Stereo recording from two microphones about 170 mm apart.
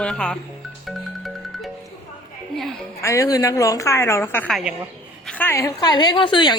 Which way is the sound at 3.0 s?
20° left (ahead or behind).